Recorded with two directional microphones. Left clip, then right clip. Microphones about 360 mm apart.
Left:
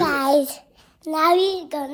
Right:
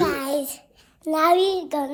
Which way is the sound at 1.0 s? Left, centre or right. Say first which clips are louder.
Left 1 dB; centre.